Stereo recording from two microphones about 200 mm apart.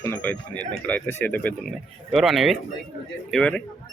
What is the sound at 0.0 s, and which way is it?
Speech, 10° left (ahead or behind).